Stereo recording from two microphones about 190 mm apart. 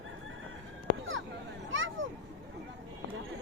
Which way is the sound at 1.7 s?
90° right.